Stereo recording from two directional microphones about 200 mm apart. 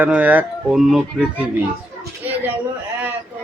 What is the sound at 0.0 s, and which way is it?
Speech, 5° right (ahead or behind).